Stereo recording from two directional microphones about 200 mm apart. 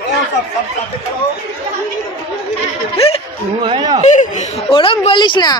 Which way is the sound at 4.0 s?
35° left (ahead or behind).